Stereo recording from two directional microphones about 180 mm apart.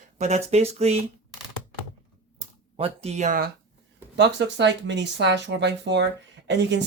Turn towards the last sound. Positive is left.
turn(degrees=-75)  # may be behind; listen again after turning